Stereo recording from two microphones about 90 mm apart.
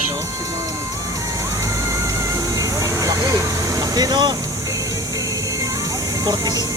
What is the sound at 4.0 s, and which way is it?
Speech, 50° right (ahead or behind).